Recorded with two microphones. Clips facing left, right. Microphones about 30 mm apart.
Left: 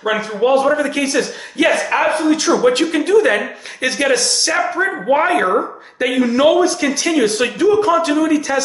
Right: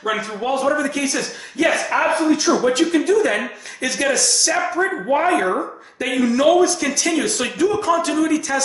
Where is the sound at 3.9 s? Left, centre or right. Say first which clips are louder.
Left 3 dB; left.